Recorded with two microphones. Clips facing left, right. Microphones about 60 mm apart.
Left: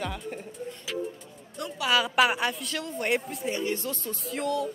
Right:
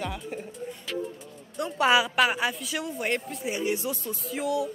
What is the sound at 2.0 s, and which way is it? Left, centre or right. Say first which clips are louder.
Speech: left 1 dB; centre.